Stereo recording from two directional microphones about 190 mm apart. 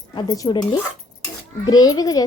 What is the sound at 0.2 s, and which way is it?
A woman's voice, 20° left (ahead or behind).